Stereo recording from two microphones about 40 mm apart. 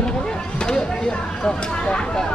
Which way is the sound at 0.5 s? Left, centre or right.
Centre.